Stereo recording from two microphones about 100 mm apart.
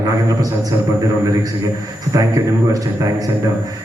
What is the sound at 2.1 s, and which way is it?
A man's voice, 35° right (ahead or behind).